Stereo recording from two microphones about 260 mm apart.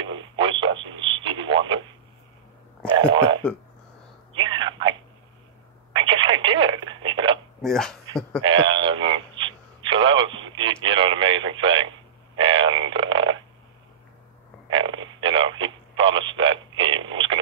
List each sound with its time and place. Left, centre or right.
0.0 s radio: centre
3.1 s speech: centre
4.3 s a sound: centre
5.9 s telephone: centre
7.6 s speech: centre
8.4 s radio: centre
12.4 s a sound: centre
14.7 s radio: centre